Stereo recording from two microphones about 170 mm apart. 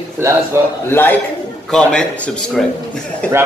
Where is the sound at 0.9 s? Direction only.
10° left (ahead or behind).